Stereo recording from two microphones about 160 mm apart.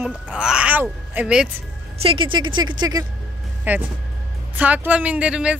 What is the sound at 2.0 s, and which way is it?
Speech, 35° right (ahead or behind).